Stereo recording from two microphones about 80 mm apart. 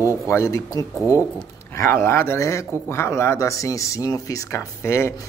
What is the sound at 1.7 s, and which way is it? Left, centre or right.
A man's voice, left.